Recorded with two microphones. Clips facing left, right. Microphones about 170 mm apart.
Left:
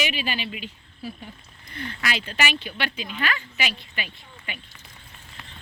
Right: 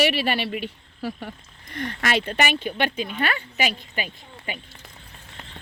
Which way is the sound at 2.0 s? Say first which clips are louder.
Right 5 dB; 50° right (ahead or behind).